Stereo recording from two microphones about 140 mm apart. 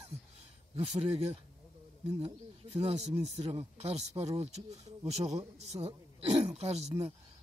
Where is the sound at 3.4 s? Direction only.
45° right (ahead or behind).